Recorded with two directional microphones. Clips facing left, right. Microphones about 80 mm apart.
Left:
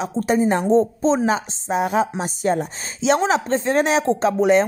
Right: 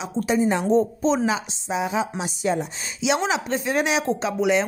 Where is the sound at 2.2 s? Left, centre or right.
Left.